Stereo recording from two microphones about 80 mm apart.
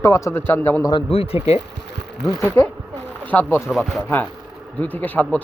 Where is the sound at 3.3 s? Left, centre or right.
Left.